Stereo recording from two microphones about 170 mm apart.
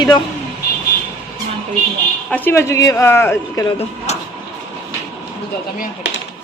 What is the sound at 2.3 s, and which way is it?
Speech, 10° left (ahead or behind).